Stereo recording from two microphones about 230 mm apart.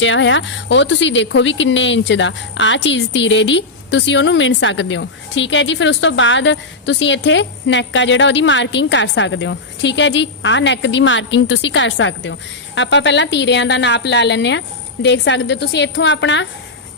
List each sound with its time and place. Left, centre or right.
0.0 s speech: left